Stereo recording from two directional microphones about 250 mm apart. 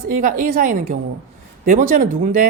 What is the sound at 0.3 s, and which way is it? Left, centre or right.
Speech, right.